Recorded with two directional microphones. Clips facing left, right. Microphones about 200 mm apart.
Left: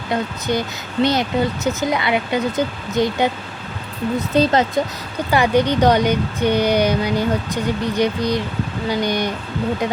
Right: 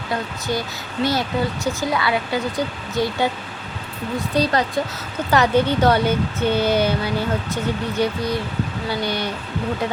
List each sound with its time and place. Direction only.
0.1 s speech: 20° left (ahead or behind)